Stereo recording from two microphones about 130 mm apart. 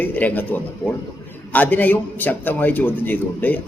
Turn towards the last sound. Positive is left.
turn(degrees=15)  # may be behind; listen again after turning